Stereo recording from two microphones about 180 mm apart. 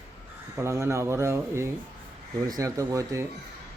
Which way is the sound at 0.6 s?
15° right (ahead or behind).